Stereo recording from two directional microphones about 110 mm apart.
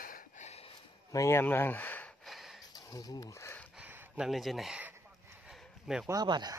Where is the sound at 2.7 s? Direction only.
35° left (ahead or behind).